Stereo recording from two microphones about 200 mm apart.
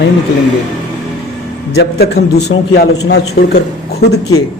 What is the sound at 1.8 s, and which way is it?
A woman's voice, 55° left (ahead or behind).